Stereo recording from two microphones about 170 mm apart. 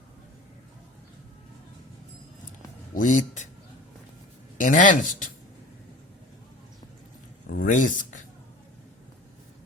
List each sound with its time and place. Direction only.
2.9 s speech: 50° left (ahead or behind)
4.6 s speech: 50° left (ahead or behind)
7.5 s speech: 50° left (ahead or behind)